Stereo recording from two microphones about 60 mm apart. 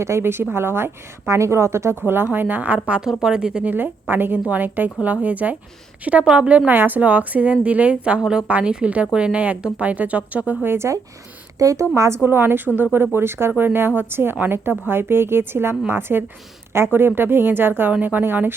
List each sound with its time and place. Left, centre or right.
0.0 s a woman's voice: right; by 3.7 s centre
3.7 s a woman's voice: right; by 6.6 s centre
6.7 s speech: right
8.2 s speech: centre
8.4 s speech: right
10.7 s a woman's voice: right
11.6 s a woman's voice: right